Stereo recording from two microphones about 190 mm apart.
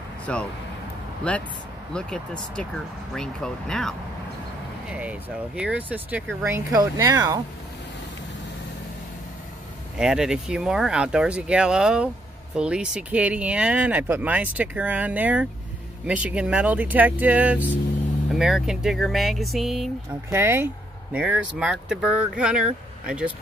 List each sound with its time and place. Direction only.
0.3 s speech: 5° left (ahead or behind)
3.2 s speech: 5° left (ahead or behind)
5.6 s speech: 10° right (ahead or behind)
9.9 s speech: 5° right (ahead or behind)
20.2 s speech: 15° right (ahead or behind)